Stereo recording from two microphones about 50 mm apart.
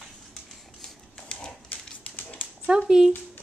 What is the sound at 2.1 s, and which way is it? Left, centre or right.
Dog, left.